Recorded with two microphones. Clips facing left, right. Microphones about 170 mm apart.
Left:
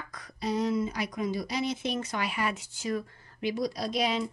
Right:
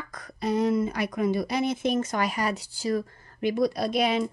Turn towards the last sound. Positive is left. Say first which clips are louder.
# right 4 dB
turn(degrees=-55)  # may be behind; listen again after turning